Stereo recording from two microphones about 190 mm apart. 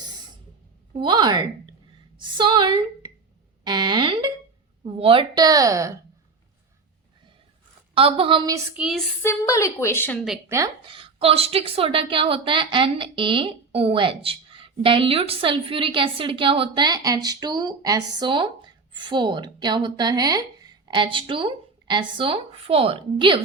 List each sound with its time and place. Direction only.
0.9 s a woman's voice: 25° right (ahead or behind)
3.6 s a sound: 25° right (ahead or behind)
4.8 s a woman's voice: 30° right (ahead or behind)
7.9 s a woman's voice: 30° right (ahead or behind)
8.7 s a sound: 5° right (ahead or behind)
9.2 s a woman's voice: 15° left (ahead or behind)
10.5 s a woman's voice: 20° right (ahead or behind)